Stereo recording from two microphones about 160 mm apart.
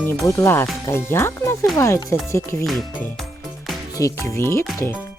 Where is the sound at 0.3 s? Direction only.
15° left (ahead or behind).